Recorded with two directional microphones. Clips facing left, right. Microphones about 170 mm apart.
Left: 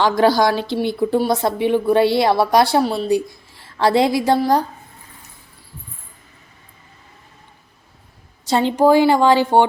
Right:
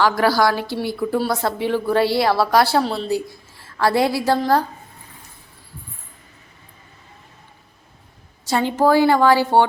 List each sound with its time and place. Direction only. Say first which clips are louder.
0.0 s a woman's voice: left 2 dB; 20° left (ahead or behind)
3.8 s a woman's voice: left 2 dB; 20° left (ahead or behind)
8.4 s a woman's voice: left 3 dB; 25° left (ahead or behind)